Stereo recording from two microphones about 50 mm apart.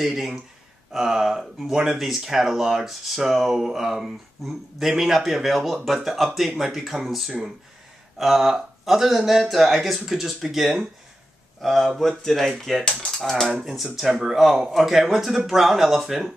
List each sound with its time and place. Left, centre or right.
0.0 s speech: centre